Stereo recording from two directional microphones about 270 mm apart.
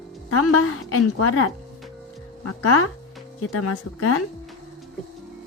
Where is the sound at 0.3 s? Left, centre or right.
Left.